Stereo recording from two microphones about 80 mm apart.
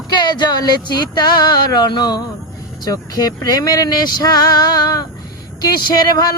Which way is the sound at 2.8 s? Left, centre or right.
Left.